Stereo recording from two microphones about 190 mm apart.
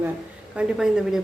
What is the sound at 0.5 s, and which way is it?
Speech, 5° right (ahead or behind).